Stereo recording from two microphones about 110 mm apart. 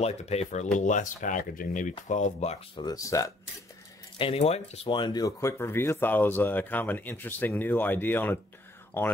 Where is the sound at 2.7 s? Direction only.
35° left (ahead or behind).